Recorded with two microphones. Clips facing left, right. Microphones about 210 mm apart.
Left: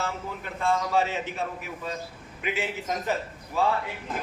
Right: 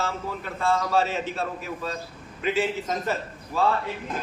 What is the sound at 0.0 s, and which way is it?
A man's voice, 15° left (ahead or behind).